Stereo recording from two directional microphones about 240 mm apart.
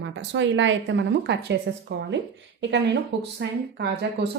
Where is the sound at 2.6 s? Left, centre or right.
Right.